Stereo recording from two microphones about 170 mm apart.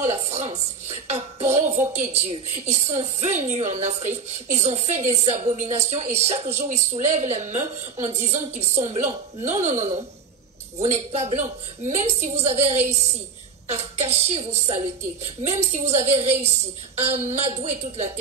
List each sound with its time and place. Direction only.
0.0 s speech: 40° right (ahead or behind)